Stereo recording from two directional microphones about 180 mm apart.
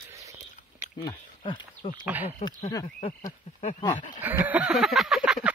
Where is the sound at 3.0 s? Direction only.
40° left (ahead or behind).